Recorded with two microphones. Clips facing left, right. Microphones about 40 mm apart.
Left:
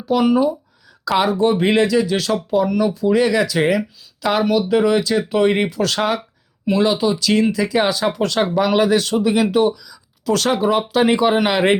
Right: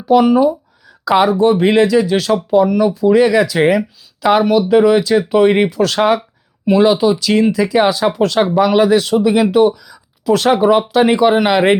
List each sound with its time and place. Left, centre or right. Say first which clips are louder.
0.0 s speech: right 5 dB; centre
9.7 s speech: right 2 dB; right
10.2 s speech: right 6 dB; centre
10.9 s speech: right 4 dB; centre